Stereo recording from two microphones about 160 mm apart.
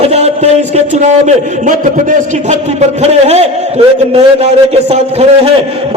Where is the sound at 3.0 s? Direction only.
45° right (ahead or behind).